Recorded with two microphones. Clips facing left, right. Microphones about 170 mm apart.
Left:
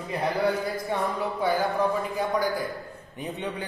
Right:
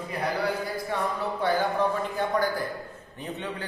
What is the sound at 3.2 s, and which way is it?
Speech, 20° left (ahead or behind).